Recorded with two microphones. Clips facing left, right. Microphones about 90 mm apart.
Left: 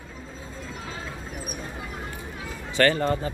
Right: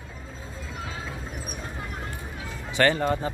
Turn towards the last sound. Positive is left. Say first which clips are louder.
# left 1 dB
turn(degrees=-15)  # may be behind; listen again after turning